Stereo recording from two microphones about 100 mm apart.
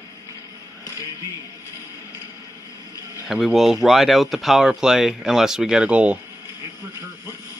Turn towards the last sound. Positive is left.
turn(degrees=-10)  # may be behind; listen again after turning